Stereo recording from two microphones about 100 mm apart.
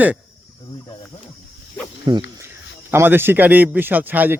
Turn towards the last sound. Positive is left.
turn(degrees=-20)  # may be behind; listen again after turning